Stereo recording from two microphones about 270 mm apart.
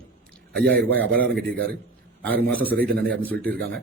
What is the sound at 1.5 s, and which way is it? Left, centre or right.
Speech, right.